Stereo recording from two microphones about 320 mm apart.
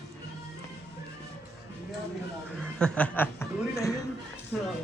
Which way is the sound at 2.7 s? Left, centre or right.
Centre.